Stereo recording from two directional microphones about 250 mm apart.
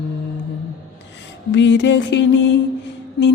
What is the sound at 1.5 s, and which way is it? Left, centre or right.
Music, left.